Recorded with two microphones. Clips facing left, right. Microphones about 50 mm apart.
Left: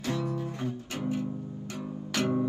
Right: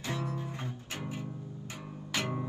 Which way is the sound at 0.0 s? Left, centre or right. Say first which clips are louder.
Left 5 dB; right.